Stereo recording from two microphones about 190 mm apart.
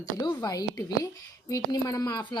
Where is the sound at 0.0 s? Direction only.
20° left (ahead or behind).